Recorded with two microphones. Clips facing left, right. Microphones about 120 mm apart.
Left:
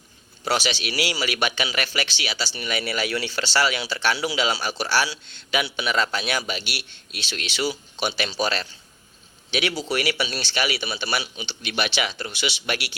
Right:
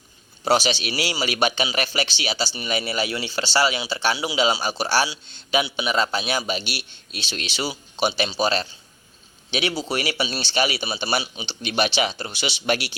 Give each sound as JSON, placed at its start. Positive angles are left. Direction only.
{"t": 0.4, "sound": "a man's voice", "side_deg": -30}